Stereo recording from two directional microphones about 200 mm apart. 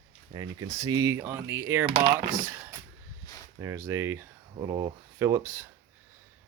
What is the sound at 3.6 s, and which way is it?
Speech, 15° right (ahead or behind).